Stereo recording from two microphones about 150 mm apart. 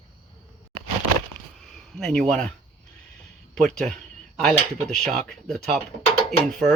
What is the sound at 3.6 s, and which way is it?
Speech, 5° left (ahead or behind).